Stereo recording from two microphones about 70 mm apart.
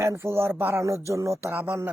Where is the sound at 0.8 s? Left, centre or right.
Right.